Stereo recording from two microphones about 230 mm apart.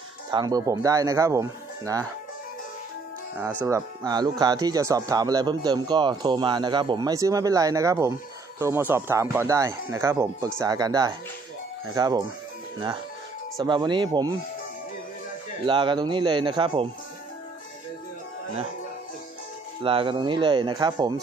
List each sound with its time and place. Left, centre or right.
0.3 s speech: centre
3.6 s speech: centre
13.6 s speech: centre
15.6 s speech: right
19.8 s speech: right